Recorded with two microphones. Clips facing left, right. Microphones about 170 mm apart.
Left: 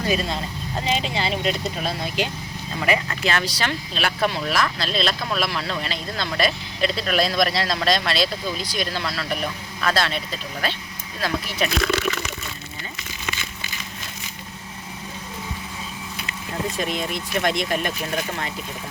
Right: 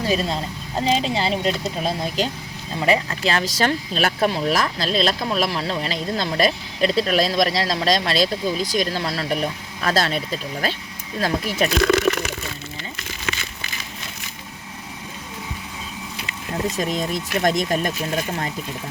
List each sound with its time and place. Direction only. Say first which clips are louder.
0.1 s speech: right 2 dB; 35° right (ahead or behind)
2.8 s speech: right 3 dB; 30° right (ahead or behind)
16.7 s speech: right 2 dB; 40° right (ahead or behind)